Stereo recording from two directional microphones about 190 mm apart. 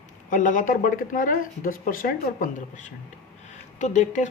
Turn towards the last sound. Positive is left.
turn(degrees=40)  # may be behind; listen again after turning